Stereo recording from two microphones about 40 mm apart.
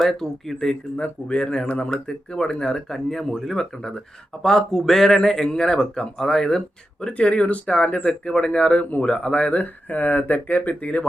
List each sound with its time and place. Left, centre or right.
0.0 s speech: centre
0.9 s speech: left
2.6 s speech: centre
7.1 s speech: left
9.9 s speech: left